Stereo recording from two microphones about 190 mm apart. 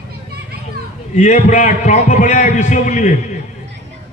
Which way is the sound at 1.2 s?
40° left (ahead or behind).